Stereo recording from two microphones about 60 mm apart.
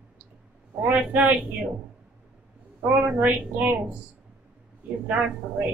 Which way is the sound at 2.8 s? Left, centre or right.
Right.